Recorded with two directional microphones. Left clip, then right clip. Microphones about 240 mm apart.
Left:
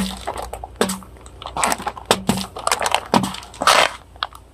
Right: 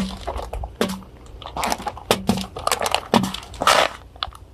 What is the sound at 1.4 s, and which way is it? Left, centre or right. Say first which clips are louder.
Crunch: left 3 dB; centre.